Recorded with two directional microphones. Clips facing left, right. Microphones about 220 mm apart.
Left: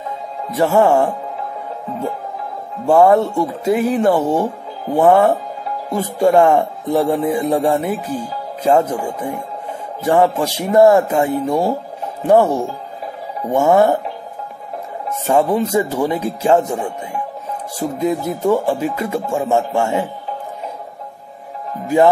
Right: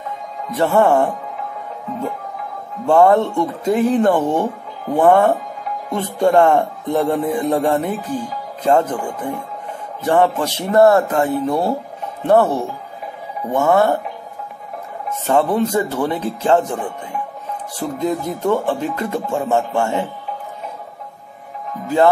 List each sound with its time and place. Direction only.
0.6 s speech: 5° left (ahead or behind)
2.9 s speech: 5° left (ahead or behind)
15.2 s speech: 10° left (ahead or behind)
21.8 s music: 15° left (ahead or behind)